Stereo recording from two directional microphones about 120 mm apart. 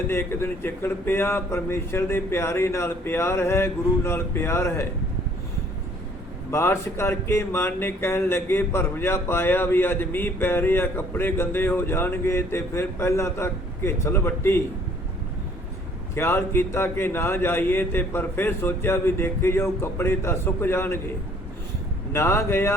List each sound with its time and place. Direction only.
0.1 s speech: 20° left (ahead or behind)
6.5 s speech: 20° left (ahead or behind)
16.1 s speech: 20° left (ahead or behind)
22.1 s speech: 20° left (ahead or behind)